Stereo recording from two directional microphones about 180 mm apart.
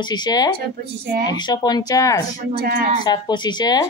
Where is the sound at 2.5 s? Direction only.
60° right (ahead or behind).